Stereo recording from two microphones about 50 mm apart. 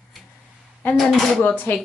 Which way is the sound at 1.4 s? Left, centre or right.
Left.